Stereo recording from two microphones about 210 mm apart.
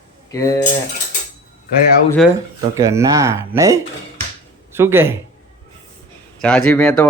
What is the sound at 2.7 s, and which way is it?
A man's voice, 15° right (ahead or behind).